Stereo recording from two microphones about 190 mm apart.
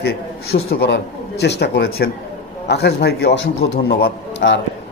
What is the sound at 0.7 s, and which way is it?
A man's voice, 60° left (ahead or behind).